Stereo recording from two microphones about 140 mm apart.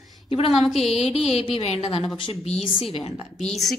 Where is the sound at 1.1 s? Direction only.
45° left (ahead or behind).